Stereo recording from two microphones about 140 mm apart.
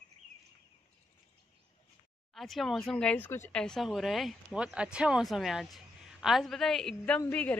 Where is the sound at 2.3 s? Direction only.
Centre (ahead or behind).